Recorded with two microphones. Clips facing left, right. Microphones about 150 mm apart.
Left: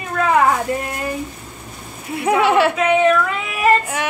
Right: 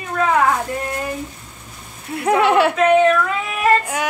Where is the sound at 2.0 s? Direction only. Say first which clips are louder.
Even; centre (ahead or behind).